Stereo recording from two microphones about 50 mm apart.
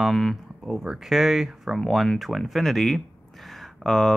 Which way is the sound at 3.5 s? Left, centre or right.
Centre.